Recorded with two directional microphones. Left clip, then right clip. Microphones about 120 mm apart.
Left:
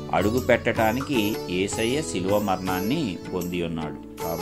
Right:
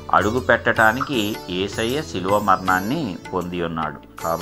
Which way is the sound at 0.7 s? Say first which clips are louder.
Right 6 dB; 40° left (ahead or behind).